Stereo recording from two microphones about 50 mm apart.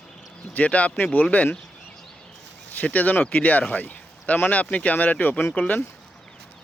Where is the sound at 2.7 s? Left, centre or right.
Left.